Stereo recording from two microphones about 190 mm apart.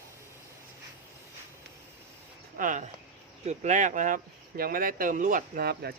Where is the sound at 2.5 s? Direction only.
40° right (ahead or behind).